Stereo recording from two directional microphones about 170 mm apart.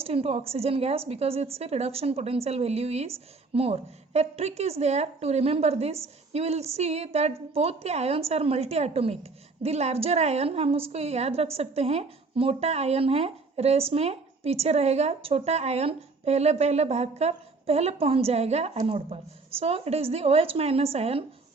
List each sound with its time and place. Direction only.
0.0 s a woman's voice: 35° right (ahead or behind)